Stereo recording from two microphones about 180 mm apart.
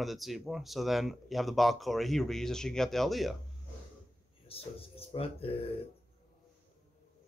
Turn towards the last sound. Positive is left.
turn(degrees=30)  # may be behind; listen again after turning